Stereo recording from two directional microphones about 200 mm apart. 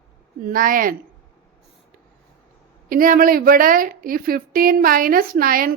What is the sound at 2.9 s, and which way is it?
A woman's voice, 45° right (ahead or behind).